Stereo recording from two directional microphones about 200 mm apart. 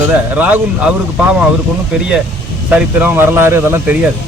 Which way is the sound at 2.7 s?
10° right (ahead or behind).